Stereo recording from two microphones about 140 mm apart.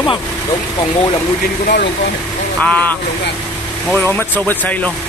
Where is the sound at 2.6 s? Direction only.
10° left (ahead or behind).